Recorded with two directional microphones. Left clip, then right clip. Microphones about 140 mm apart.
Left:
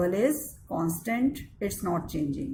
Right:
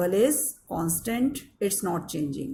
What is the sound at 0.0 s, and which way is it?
Speech, 55° right (ahead or behind).